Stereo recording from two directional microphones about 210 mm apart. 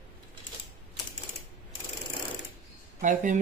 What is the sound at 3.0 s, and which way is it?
Speech, 40° right (ahead or behind).